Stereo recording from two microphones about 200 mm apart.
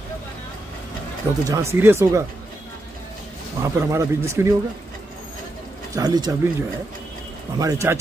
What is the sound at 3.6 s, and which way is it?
Speech, 15° right (ahead or behind).